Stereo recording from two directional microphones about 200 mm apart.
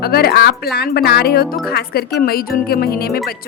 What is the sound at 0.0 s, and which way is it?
Speech, 50° left (ahead or behind).